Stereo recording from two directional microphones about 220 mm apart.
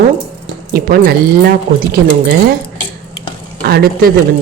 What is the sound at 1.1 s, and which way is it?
Speech, 45° right (ahead or behind).